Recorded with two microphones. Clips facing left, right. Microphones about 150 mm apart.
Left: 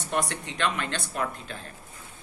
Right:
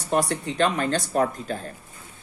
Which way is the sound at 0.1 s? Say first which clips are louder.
Right 6 dB; 35° right (ahead or behind).